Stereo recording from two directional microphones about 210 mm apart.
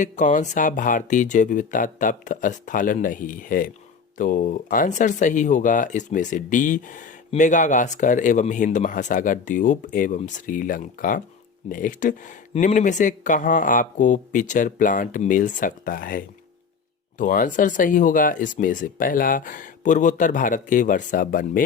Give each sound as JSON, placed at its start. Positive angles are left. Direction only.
{"t": 0.0, "sound": "speech", "side_deg": 35}